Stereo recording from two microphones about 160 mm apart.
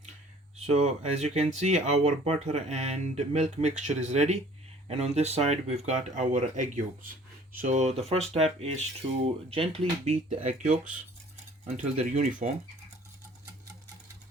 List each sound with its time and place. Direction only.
0.5 s speech: 40° right (ahead or behind)
12.4 s speech: 55° right (ahead or behind)